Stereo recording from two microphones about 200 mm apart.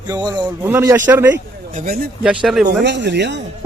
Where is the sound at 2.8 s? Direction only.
60° right (ahead or behind).